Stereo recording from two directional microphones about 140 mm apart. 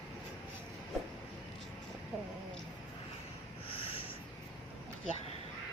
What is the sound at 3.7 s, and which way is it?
Writing, 40° left (ahead or behind).